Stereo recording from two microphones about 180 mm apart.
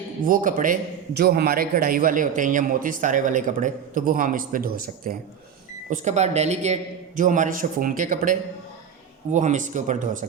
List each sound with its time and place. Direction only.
0.3 s a man's voice: 50° right (ahead or behind)
5.9 s a man's voice: 40° right (ahead or behind)